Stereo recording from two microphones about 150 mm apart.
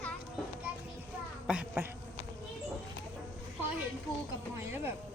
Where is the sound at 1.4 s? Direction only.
10° right (ahead or behind).